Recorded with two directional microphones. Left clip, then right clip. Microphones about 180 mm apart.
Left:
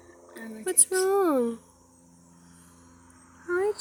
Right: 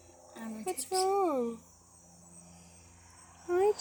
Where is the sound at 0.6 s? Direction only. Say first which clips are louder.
Left 5 dB; 45° left (ahead or behind).